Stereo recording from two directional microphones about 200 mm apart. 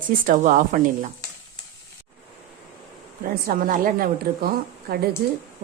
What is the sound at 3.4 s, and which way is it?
Speech, 45° right (ahead or behind).